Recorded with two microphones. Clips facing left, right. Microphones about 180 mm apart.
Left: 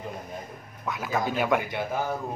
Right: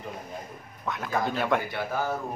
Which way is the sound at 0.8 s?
Centre (ahead or behind).